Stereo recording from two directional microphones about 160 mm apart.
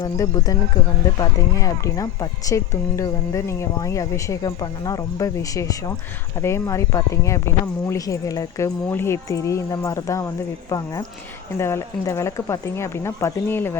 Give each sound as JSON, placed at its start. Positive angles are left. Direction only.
{"t": 0.0, "sound": "speech", "side_deg": 25}
{"t": 11.5, "sound": "speech", "side_deg": 15}